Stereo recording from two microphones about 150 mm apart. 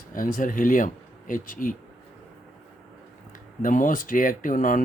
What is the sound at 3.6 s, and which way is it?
Speech, 60° left (ahead or behind).